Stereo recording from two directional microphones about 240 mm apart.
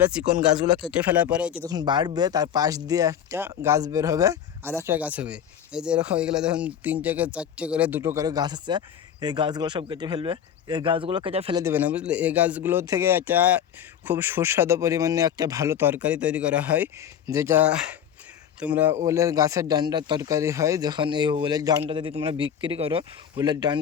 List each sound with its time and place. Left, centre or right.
0.8 s speech: centre
1.6 s speech: centre
11.6 s speech: centre